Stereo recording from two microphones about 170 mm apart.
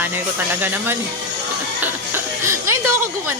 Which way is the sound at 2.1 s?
15° right (ahead or behind).